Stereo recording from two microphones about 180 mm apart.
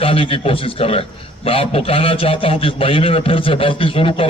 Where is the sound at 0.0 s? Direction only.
30° left (ahead or behind).